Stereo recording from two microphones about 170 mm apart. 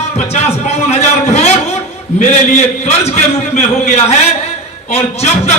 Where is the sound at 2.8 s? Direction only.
40° left (ahead or behind).